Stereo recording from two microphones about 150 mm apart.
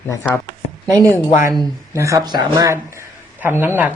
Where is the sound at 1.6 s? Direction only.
20° right (ahead or behind).